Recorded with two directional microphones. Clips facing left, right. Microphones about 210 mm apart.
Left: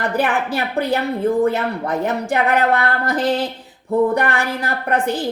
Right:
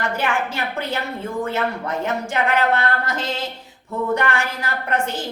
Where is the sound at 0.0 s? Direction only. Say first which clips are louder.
Left 4 dB; 35° left (ahead or behind).